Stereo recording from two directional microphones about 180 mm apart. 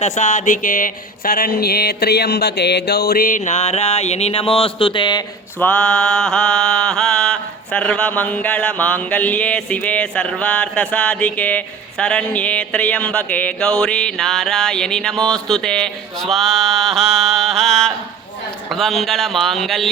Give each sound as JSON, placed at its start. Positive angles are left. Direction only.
{"t": 0.0, "sound": "speech", "side_deg": 40}
{"t": 5.5, "sound": "mantra", "side_deg": 5}